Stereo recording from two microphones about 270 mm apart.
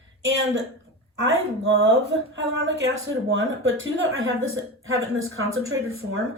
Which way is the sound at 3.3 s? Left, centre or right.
Right.